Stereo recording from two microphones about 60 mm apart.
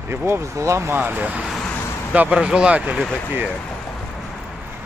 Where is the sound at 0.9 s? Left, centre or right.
Right.